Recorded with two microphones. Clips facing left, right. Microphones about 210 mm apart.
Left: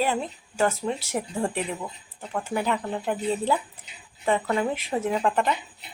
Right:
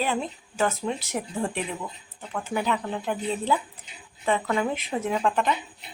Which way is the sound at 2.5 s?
10° left (ahead or behind).